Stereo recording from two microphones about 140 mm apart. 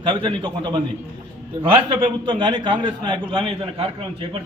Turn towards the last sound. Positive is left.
turn(degrees=-40)  # may be behind; listen again after turning